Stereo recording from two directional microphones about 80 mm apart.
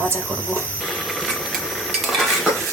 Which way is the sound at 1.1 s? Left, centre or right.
Centre.